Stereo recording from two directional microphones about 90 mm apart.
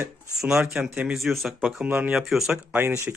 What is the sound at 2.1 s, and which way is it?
Speech, 5° right (ahead or behind).